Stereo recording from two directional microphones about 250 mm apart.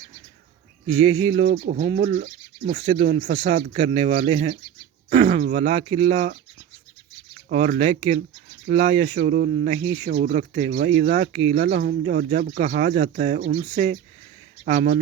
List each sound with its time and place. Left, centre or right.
1.0 s speech: right
7.5 s speech: right
9.2 s speech: right
9.8 s speech: centre
10.1 s speech: right